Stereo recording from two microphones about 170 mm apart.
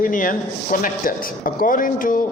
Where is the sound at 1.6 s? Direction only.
55° left (ahead or behind).